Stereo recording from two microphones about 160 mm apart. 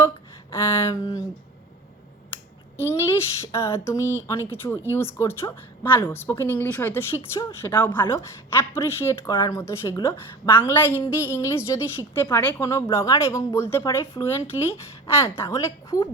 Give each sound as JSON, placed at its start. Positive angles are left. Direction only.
{"t": 0.5, "sound": "a woman's voice", "side_deg": 15}
{"t": 2.7, "sound": "a woman's voice", "side_deg": 15}